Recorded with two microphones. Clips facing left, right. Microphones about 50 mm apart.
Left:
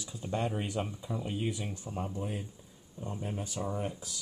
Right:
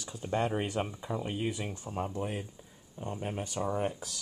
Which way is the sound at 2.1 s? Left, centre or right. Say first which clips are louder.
Right 2 dB; right.